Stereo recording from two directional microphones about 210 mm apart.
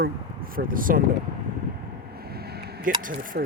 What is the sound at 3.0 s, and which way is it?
Speech, 40° right (ahead or behind).